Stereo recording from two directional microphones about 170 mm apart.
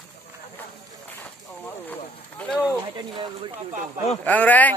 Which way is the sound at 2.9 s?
30° right (ahead or behind).